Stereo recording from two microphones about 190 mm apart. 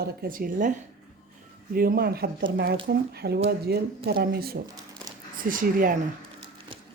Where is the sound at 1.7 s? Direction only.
50° right (ahead or behind).